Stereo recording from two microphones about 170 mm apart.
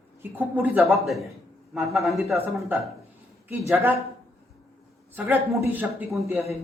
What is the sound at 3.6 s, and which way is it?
Speech, 10° right (ahead or behind).